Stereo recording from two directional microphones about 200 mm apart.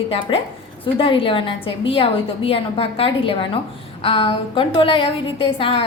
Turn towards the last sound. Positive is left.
turn(degrees=30)  # may be behind; listen again after turning